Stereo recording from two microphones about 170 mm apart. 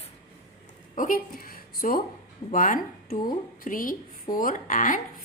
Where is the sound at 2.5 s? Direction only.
50° left (ahead or behind).